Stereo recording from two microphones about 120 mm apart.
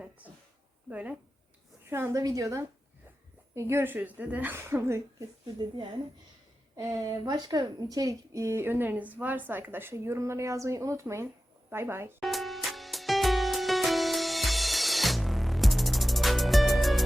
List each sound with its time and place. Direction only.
0.9 s a woman's voice: 10° right (ahead or behind)
6.7 s a woman's voice: 30° right (ahead or behind)
12.2 s music: centre (ahead or behind)